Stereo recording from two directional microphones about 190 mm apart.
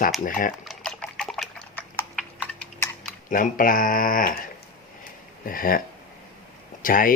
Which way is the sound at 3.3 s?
45° left (ahead or behind).